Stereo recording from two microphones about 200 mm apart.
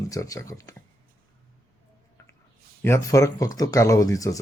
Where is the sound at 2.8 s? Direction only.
15° left (ahead or behind).